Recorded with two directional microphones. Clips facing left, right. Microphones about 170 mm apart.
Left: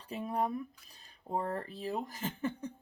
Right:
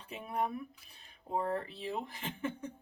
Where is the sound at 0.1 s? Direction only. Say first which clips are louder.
Left 2 dB; 35° left (ahead or behind).